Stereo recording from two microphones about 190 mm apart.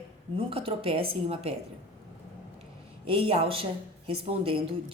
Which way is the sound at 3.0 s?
30° right (ahead or behind).